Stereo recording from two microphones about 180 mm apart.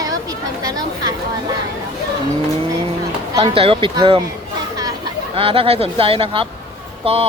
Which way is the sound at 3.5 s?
30° right (ahead or behind).